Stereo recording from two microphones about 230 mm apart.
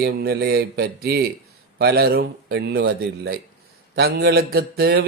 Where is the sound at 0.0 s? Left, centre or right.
Right.